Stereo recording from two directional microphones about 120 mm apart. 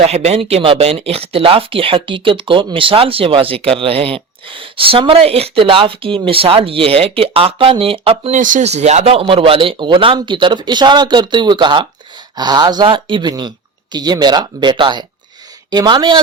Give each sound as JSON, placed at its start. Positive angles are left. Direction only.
{"t": 0.0, "sound": "speech", "side_deg": -60}
{"t": 8.3, "sound": "speech", "side_deg": -90}